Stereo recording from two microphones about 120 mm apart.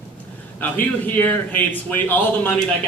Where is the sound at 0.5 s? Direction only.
15° left (ahead or behind).